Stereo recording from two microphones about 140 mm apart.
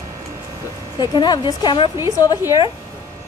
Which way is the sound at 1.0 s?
30° left (ahead or behind).